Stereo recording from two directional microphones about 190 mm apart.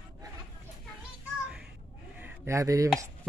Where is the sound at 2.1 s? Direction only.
10° right (ahead or behind).